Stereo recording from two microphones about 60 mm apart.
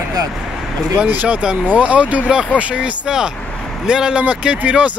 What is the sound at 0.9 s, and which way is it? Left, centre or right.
Speech, right.